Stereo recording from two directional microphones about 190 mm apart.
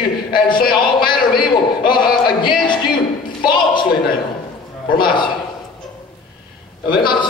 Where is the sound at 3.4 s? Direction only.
25° left (ahead or behind).